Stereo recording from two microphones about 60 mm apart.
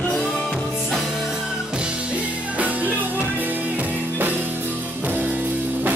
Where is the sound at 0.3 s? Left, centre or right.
Centre.